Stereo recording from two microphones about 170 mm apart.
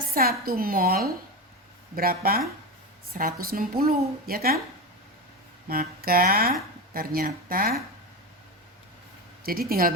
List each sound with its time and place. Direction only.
0.1 s speech: 60° right (ahead or behind)
5.6 s speech: 60° right (ahead or behind)
9.4 s speech: 60° right (ahead or behind)